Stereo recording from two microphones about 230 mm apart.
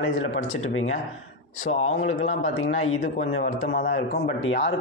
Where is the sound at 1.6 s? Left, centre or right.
Left.